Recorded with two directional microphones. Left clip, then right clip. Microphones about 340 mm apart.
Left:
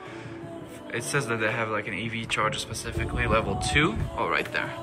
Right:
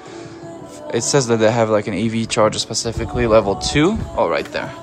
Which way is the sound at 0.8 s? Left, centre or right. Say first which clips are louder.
Right 11 dB; centre.